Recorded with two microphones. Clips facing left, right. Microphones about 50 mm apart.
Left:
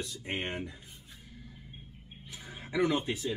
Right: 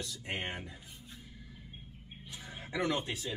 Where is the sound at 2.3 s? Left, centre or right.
Centre.